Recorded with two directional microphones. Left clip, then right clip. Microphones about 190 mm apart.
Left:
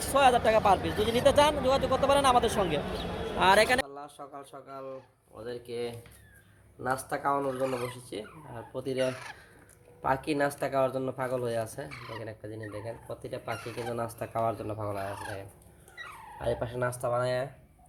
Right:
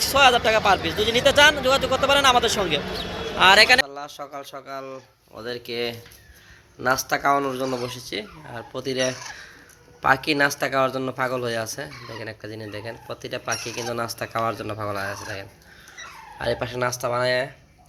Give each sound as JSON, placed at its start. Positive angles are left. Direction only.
{"t": 0.0, "sound": "speech", "side_deg": 10}
{"t": 3.8, "sound": "a sound", "side_deg": -5}
{"t": 4.5, "sound": "speech", "side_deg": -10}